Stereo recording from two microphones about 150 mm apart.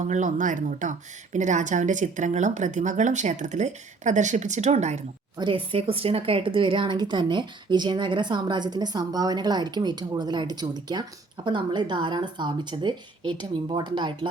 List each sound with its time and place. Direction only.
0.0 s speech: 55° right (ahead or behind)
5.4 s speech: 35° right (ahead or behind)